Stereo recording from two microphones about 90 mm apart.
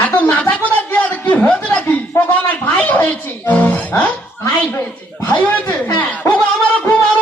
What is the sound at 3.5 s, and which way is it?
Speech, 15° left (ahead or behind).